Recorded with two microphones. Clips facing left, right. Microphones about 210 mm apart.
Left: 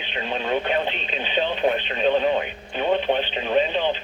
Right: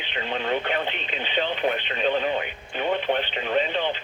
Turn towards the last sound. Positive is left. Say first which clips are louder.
# left 3 dB
turn(degrees=20)  # may be behind; listen again after turning